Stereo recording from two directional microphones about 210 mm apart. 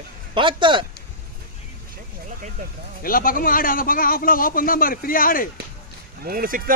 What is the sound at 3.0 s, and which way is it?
A man's voice, 45° left (ahead or behind).